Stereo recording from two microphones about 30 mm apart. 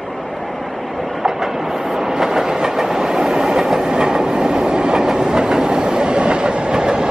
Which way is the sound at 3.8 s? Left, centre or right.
Right.